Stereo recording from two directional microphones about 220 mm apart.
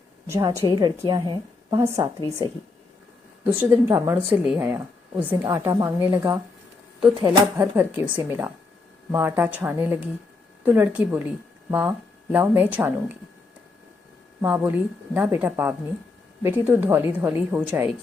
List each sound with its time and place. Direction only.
0.3 s speech: 15° right (ahead or behind)
2.2 s speech: 15° left (ahead or behind)
3.4 s speech: 10° right (ahead or behind)
7.5 s speech: 10° right (ahead or behind)
14.4 s speech: 5° right (ahead or behind)